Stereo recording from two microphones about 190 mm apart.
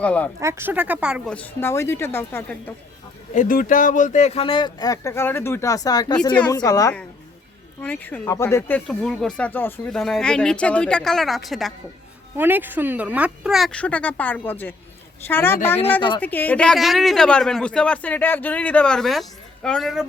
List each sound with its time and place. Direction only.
0.0 s speech: 5° left (ahead or behind)
0.3 s speech: 15° right (ahead or behind)
1.3 s speech: 10° left (ahead or behind)
3.3 s speech: 45° left (ahead or behind); by 6.9 s 20° left (ahead or behind)
7.8 s speech: 10° left (ahead or behind)
12.4 s speech: 10° right (ahead or behind); by 15.8 s 10° left (ahead or behind)
16.0 s speech: 25° left (ahead or behind)
16.2 s speech: 10° left (ahead or behind)